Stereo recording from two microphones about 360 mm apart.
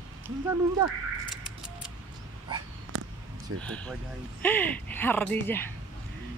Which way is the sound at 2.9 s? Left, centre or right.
Right.